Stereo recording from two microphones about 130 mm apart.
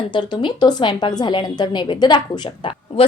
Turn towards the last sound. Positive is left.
turn(degrees=45)  # may be behind; listen again after turning